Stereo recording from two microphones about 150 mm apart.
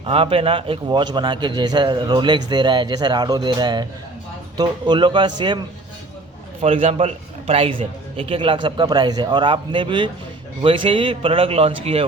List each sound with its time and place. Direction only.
0.0 s a man's voice: 40° right (ahead or behind)
6.6 s a man's voice: 40° right (ahead or behind)